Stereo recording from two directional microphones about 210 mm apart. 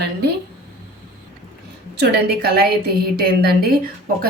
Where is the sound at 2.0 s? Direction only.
45° right (ahead or behind).